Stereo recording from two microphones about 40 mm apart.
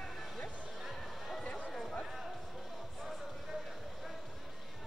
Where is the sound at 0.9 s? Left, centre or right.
Centre.